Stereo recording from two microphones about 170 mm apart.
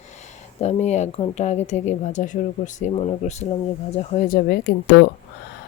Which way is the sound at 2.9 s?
35° left (ahead or behind).